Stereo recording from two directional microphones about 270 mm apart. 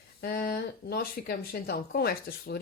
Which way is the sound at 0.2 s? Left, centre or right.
Left.